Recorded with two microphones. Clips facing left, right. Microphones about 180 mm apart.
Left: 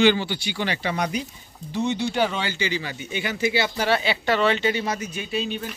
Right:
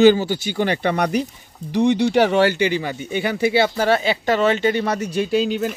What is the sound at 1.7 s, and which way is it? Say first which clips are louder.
Speech: right 8 dB; 90° right.